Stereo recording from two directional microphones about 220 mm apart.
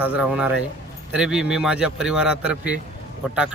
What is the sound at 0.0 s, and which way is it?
Speech, 5° right (ahead or behind).